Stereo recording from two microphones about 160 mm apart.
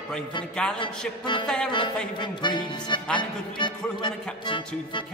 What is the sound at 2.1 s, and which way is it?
Speech, 30° left (ahead or behind).